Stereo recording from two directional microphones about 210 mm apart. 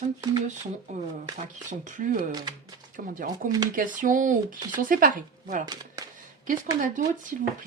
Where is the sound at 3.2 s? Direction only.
40° right (ahead or behind).